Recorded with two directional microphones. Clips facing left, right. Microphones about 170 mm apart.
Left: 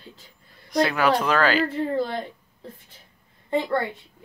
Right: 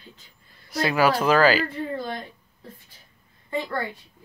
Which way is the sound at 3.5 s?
25° left (ahead or behind).